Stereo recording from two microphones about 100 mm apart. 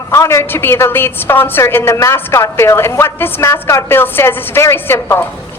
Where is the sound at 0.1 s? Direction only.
30° left (ahead or behind).